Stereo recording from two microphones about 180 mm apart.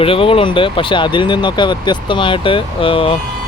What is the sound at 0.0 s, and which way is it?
Speech, 30° left (ahead or behind).